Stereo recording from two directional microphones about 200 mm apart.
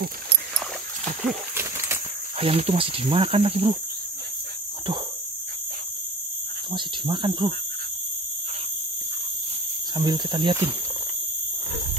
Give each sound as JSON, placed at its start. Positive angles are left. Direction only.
{"t": 1.5, "sound": "a sound", "side_deg": -10}
{"t": 2.3, "sound": "speech", "side_deg": -30}
{"t": 6.7, "sound": "speech", "side_deg": -25}
{"t": 9.9, "sound": "speech", "side_deg": -20}